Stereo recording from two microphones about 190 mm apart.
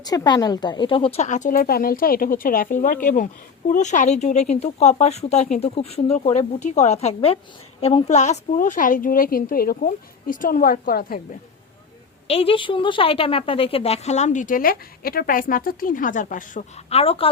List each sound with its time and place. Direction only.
0.0 s a woman's voice: 20° left (ahead or behind); by 11.2 s 50° left (ahead or behind)
12.3 s a woman's voice: 30° left (ahead or behind)